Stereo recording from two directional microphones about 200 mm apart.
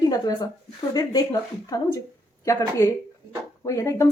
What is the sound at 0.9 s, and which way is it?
Speech, 20° left (ahead or behind).